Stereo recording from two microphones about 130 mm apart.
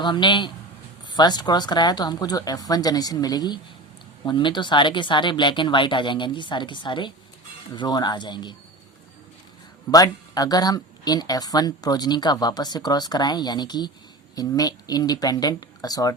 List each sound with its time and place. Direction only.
0.0 s a woman's voice: 35° left (ahead or behind)
9.9 s a woman's voice: 30° left (ahead or behind)